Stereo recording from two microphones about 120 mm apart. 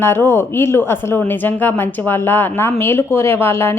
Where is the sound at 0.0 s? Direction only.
20° left (ahead or behind).